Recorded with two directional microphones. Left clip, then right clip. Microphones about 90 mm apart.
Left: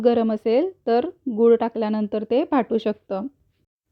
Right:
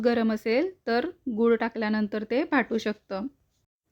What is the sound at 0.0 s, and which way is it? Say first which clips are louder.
Speech: left 6 dB; 30° left (ahead or behind).